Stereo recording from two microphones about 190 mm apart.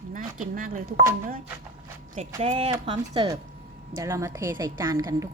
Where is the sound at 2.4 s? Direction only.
30° right (ahead or behind).